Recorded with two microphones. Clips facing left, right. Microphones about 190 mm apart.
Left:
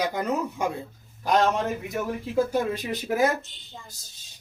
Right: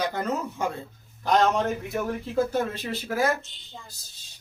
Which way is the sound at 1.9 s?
10° left (ahead or behind).